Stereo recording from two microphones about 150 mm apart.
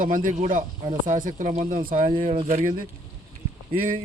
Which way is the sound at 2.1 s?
35° right (ahead or behind).